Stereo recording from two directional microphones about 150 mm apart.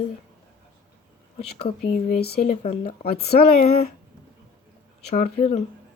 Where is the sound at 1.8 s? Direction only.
80° left.